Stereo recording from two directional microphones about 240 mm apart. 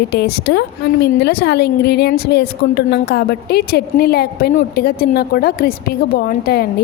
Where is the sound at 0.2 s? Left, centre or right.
Left.